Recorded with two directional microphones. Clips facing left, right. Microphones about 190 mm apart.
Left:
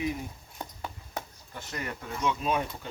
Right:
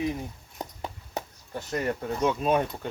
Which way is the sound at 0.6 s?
20° right (ahead or behind).